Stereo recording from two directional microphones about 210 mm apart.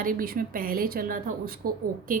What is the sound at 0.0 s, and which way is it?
A woman's voice, 40° right (ahead or behind).